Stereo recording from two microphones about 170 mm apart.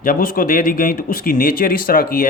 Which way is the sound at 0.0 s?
55° left (ahead or behind).